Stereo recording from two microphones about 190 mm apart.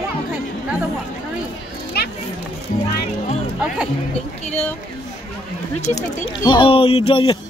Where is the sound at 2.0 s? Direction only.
55° left (ahead or behind).